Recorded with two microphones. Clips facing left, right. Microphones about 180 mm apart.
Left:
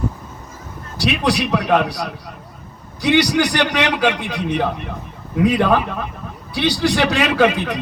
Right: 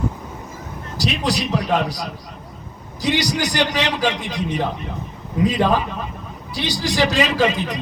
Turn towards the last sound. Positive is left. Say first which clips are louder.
# left 3 dB
turn(degrees=60)  # may be behind; listen again after turning